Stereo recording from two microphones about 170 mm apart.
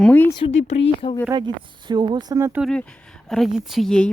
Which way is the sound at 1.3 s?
25° right (ahead or behind).